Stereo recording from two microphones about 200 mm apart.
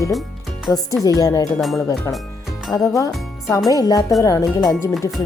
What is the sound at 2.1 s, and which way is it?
Speech, 15° left (ahead or behind).